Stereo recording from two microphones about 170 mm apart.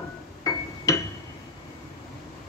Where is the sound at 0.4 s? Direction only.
20° left (ahead or behind).